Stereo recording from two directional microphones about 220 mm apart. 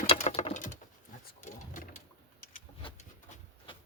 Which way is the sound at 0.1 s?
25° left (ahead or behind).